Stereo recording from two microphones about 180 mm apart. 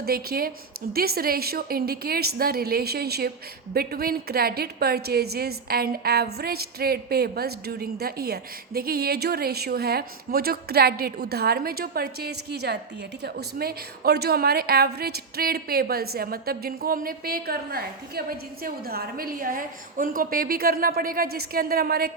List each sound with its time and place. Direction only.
0.0 s a woman's voice: 60° right (ahead or behind)